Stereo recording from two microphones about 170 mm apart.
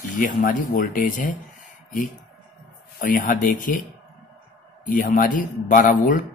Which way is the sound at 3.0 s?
50° left (ahead or behind).